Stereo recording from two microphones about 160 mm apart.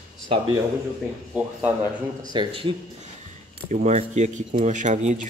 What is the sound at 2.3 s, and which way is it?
Speech, 30° right (ahead or behind).